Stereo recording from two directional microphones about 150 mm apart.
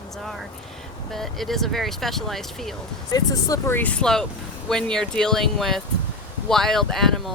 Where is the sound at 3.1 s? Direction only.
25° left (ahead or behind).